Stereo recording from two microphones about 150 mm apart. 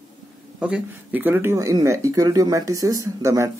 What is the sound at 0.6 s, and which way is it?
Speech, 10° right (ahead or behind).